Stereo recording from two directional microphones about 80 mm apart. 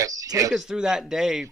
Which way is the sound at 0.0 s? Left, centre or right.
Right.